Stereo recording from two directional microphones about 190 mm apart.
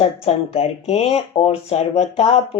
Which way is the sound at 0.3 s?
35° left (ahead or behind).